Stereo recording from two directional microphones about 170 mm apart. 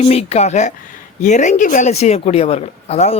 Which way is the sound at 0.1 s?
40° left (ahead or behind).